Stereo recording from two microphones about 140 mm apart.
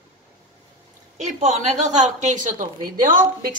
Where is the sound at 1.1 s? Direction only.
55° right (ahead or behind).